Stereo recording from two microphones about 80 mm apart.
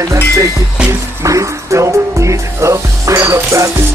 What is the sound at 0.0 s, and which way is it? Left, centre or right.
Music, right.